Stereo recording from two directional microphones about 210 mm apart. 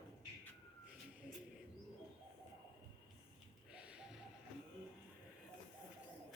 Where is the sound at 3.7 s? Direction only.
5° right (ahead or behind).